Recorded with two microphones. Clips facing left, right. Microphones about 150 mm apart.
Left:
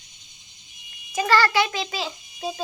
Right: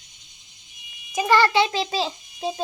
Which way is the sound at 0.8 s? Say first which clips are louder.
Right 2 dB; 15° right (ahead or behind).